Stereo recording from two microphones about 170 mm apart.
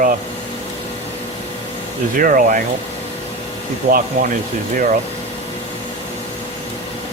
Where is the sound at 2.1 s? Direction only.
55° right (ahead or behind).